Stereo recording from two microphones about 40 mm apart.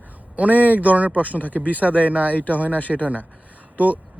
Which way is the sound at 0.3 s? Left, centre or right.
Right.